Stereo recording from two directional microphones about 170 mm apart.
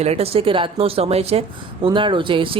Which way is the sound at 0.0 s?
35° right (ahead or behind).